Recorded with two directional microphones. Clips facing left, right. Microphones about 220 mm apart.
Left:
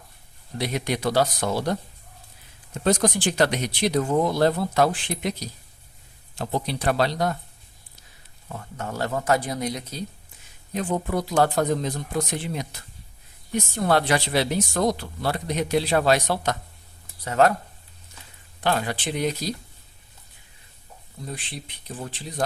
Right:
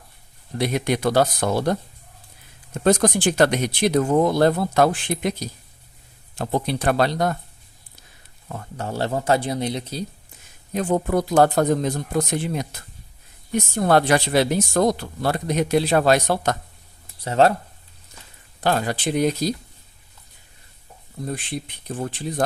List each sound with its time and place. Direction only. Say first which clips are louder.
0.6 s speech: right 4 dB; 50° right (ahead or behind)
2.8 s speech: right 4 dB; 55° right (ahead or behind)
6.4 s speech: right 3 dB; 50° right (ahead or behind)
8.8 s a man's voice: right 3 dB; 30° right (ahead or behind)
10.8 s speech: right 5 dB; 45° right (ahead or behind)
17.2 s a man's voice: right 2 dB; 30° right (ahead or behind)
18.6 s speech: right 3 dB; 40° right (ahead or behind)
21.8 s speech: right 7 dB; 50° right (ahead or behind)